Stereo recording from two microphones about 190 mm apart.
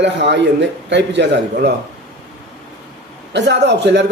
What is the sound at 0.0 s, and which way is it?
A man's voice, 65° right (ahead or behind).